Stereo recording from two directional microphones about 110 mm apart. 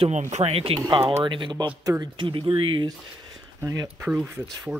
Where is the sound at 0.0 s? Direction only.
85° right; by 0.7 s 60° right (ahead or behind).